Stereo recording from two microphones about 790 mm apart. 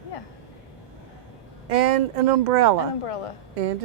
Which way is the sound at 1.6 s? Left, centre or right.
Right.